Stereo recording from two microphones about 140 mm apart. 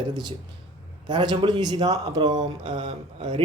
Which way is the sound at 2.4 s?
60° right (ahead or behind).